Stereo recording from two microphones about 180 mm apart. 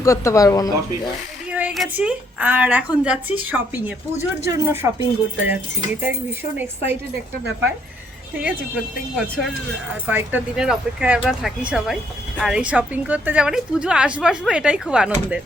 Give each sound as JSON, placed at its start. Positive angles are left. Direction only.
{"t": 0.0, "sound": "speech", "side_deg": 15}
{"t": 1.5, "sound": "a woman's voice", "side_deg": -5}
{"t": 8.4, "sound": "a woman's voice", "side_deg": -5}